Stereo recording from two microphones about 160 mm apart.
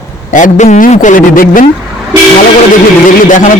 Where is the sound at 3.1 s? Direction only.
55° left (ahead or behind).